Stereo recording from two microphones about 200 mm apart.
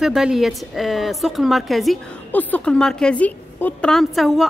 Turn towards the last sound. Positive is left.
turn(degrees=0)  # may be behind; listen again after turning